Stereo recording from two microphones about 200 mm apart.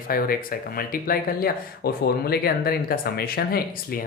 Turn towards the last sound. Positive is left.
turn(degrees=50)  # may be behind; listen again after turning